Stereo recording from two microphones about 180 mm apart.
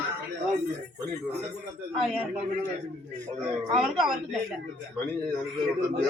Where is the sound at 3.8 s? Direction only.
Centre (ahead or behind).